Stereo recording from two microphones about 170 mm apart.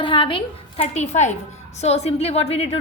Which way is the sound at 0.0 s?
30° left (ahead or behind).